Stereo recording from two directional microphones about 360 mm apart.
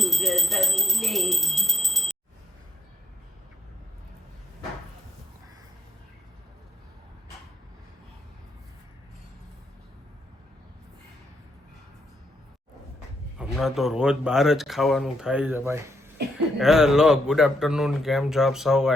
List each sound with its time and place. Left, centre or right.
0.0 s speech: centre
13.4 s speech: centre